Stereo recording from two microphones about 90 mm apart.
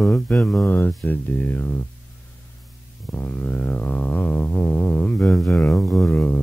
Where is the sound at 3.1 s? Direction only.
20° left (ahead or behind).